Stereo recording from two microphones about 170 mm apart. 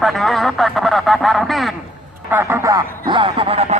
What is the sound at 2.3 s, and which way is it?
Speech, 10° right (ahead or behind).